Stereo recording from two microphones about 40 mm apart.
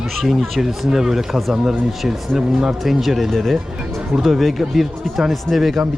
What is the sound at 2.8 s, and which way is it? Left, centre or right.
Speech, centre.